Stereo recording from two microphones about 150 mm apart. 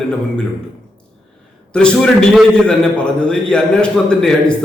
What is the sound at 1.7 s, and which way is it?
A man's voice, 5° left (ahead or behind).